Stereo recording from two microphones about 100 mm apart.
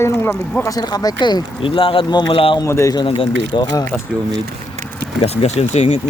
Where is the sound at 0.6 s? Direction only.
40° left (ahead or behind).